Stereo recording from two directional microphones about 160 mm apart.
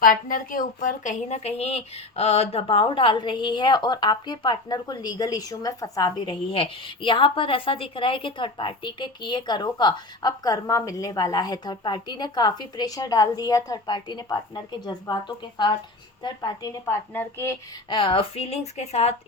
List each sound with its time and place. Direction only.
0.0 s a woman's voice: 60° left (ahead or behind); by 17.6 s 15° left (ahead or behind)
17.8 s speech: 30° left (ahead or behind)